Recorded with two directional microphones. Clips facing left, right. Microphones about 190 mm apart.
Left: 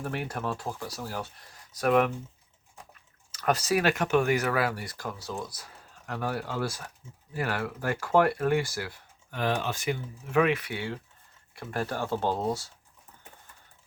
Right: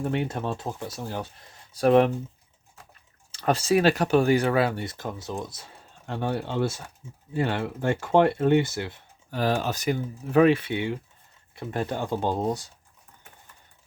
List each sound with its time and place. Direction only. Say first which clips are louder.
0.0 s speech: right 5 dB; 25° right (ahead or behind)
3.3 s speech: right 4 dB; 30° right (ahead or behind)
9.3 s speech: right 4 dB; 35° right (ahead or behind); by 12.7 s 20° right (ahead or behind)